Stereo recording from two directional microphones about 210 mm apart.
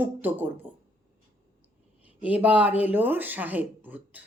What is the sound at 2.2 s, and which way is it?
A woman's voice, 5° right (ahead or behind).